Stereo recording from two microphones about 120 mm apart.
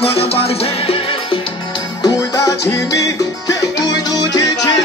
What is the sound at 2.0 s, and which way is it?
Music, 30° left (ahead or behind).